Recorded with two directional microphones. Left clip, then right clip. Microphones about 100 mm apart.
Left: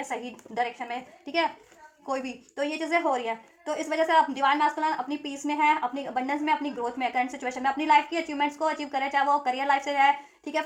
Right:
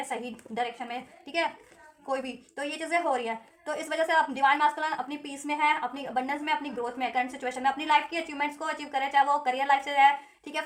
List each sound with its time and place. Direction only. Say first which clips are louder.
0.1 s a woman's voice: left 1 dB; 25° left (ahead or behind)